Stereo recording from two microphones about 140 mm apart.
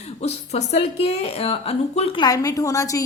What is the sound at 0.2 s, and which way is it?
A woman's voice, 50° left (ahead or behind).